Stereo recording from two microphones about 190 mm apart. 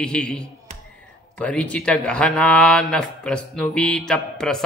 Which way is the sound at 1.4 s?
5° left (ahead or behind).